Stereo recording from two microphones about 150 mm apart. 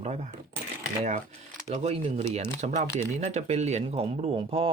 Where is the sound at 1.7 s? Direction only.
45° right (ahead or behind).